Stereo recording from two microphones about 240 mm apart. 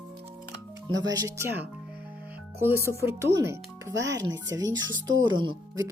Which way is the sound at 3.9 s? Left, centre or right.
Right.